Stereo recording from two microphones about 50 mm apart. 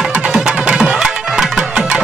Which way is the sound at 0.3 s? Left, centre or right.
Centre.